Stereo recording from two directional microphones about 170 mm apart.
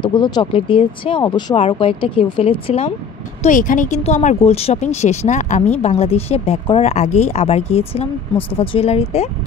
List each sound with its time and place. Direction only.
0.0 s speech: 25° left (ahead or behind)
3.4 s speech: 50° left (ahead or behind)